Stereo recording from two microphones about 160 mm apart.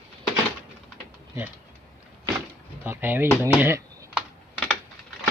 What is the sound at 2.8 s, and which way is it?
Speech, 10° right (ahead or behind).